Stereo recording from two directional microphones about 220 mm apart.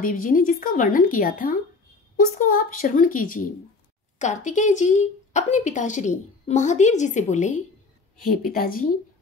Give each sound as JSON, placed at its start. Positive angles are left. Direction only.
{"t": 0.0, "sound": "speech", "side_deg": 40}